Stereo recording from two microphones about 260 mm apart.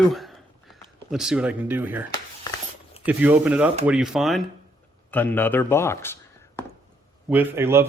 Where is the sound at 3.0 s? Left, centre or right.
Centre.